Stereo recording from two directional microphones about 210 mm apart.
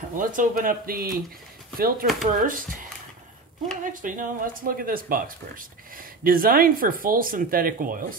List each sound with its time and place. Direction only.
0.1 s speech: 40° right (ahead or behind)
3.8 s speech: 40° right (ahead or behind)